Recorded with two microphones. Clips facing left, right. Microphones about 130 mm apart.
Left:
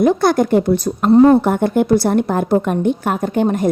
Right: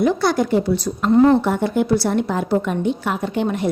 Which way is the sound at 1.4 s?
50° left (ahead or behind).